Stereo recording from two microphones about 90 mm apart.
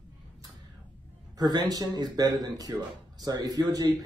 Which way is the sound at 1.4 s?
45° right (ahead or behind).